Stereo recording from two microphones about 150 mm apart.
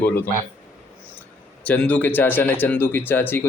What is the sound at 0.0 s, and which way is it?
Speech, 15° left (ahead or behind).